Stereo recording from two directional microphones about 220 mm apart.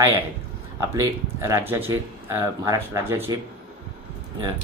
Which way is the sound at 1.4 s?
10° right (ahead or behind).